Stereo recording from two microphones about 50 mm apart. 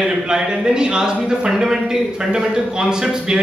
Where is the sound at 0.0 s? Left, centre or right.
Centre.